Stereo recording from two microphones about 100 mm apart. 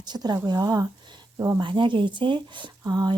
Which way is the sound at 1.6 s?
55° right (ahead or behind).